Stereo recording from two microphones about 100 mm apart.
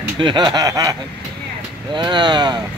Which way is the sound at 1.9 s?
50° right (ahead or behind).